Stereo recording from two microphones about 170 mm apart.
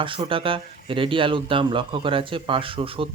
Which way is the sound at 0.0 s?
30° right (ahead or behind).